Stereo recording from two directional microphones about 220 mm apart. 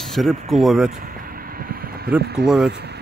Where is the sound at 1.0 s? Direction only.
40° right (ahead or behind).